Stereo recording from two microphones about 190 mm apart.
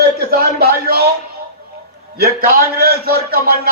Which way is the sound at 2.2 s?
55° right (ahead or behind).